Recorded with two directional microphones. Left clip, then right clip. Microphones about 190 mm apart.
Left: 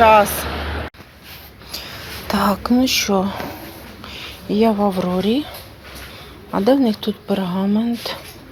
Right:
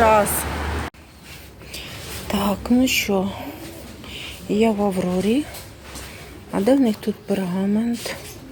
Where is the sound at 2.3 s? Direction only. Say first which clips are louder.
Left 4 dB; 5° right (ahead or behind).